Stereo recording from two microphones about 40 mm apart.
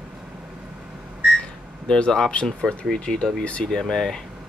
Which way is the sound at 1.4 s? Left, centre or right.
Left.